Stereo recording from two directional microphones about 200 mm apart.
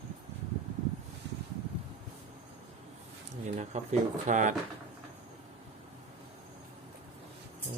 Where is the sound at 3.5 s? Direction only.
35° right (ahead or behind).